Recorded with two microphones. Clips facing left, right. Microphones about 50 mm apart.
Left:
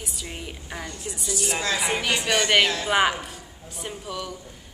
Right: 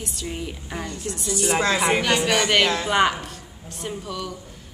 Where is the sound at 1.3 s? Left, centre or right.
Right.